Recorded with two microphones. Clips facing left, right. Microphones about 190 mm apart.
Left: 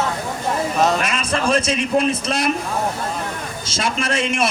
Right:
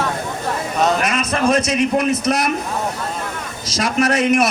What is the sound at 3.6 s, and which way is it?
Speech, 25° left (ahead or behind).